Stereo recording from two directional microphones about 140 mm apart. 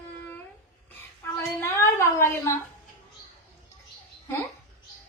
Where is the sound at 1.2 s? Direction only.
20° left (ahead or behind).